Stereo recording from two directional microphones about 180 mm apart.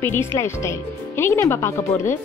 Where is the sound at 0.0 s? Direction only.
10° left (ahead or behind).